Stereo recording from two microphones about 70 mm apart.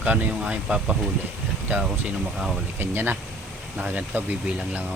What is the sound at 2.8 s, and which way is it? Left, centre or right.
Speech, right.